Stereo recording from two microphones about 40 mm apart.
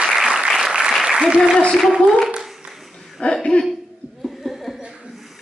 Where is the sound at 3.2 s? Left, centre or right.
Left.